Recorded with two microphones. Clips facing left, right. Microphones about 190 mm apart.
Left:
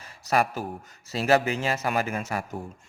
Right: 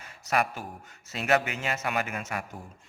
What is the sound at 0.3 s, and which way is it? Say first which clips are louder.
Speech: left 4 dB; 35° left (ahead or behind).